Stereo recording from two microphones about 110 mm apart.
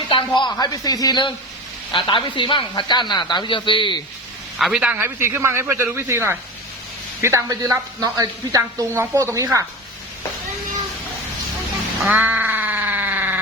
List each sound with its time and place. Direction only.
0.1 s a sound: 45° left (ahead or behind)
0.5 s speech: 35° left (ahead or behind)
1.9 s speech: 50° left (ahead or behind)
4.5 s a man's voice: 5° right (ahead or behind)
4.9 s a woman's voice: 20° right (ahead or behind)
12.1 s a sound: 15° right (ahead or behind)